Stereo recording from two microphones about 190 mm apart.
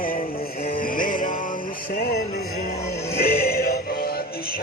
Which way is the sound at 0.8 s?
45° left (ahead or behind).